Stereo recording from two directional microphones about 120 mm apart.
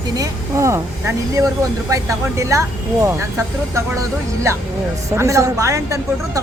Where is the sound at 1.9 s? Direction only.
25° right (ahead or behind).